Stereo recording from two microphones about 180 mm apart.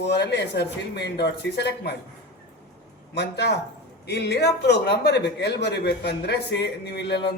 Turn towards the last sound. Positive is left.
turn(degrees=65)  # may be behind; listen again after turning